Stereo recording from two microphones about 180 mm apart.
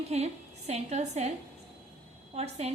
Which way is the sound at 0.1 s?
35° right (ahead or behind).